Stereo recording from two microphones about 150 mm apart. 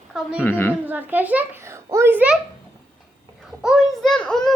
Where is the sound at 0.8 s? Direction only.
10° right (ahead or behind).